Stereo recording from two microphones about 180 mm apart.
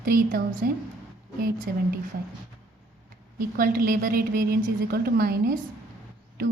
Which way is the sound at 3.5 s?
55° right (ahead or behind).